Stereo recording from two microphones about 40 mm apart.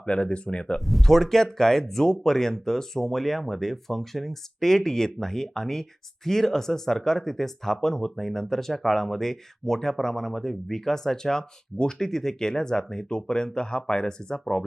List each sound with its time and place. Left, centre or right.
0.0 s speech: left
0.9 s speech: centre